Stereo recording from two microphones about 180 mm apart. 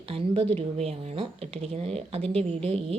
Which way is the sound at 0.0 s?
30° right (ahead or behind).